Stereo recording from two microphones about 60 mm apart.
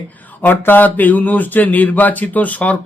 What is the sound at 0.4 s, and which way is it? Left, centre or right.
A man's voice, left.